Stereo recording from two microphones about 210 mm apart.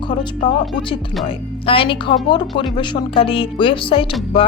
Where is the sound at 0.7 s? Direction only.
25° left (ahead or behind).